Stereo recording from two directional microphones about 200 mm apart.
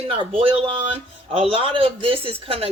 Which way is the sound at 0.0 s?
30° right (ahead or behind).